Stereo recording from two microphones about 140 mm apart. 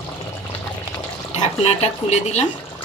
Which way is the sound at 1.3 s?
50° left (ahead or behind).